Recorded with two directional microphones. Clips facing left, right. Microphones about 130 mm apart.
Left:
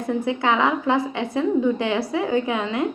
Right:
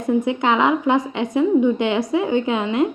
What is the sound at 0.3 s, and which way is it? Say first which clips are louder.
A woman's voice: even; 20° right (ahead or behind).